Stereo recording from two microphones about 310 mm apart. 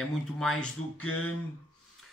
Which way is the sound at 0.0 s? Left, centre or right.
Centre.